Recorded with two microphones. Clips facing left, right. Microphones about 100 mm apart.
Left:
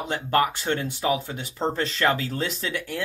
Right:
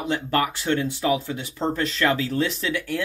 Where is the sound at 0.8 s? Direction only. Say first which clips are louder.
Right 2 dB; 25° left (ahead or behind).